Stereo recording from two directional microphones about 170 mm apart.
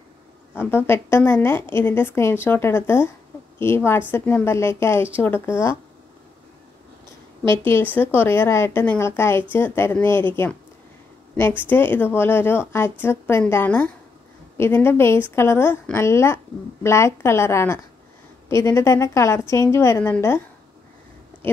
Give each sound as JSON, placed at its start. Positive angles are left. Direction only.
{"t": 0.6, "sound": "a woman's voice", "side_deg": 15}
{"t": 7.7, "sound": "a woman's voice", "side_deg": 10}